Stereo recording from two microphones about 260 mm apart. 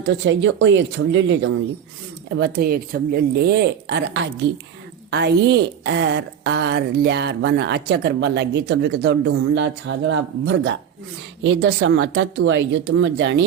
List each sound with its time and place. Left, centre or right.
0.0 s speech: right
2.4 s a woman's voice: right